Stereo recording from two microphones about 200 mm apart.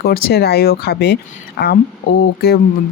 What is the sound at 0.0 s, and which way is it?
Speech, 50° left (ahead or behind).